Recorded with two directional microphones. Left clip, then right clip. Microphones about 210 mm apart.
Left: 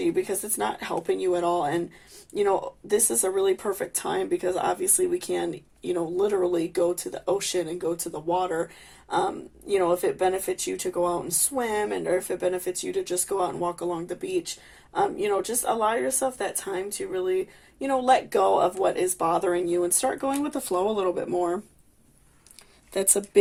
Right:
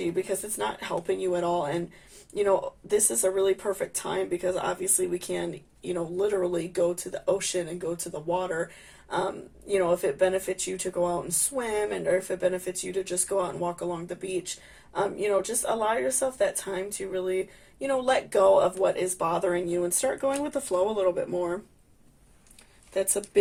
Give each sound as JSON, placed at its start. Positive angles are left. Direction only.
{"t": 0.2, "sound": "speech", "side_deg": 35}
{"t": 9.7, "sound": "speech", "side_deg": 30}
{"t": 22.9, "sound": "speech", "side_deg": 40}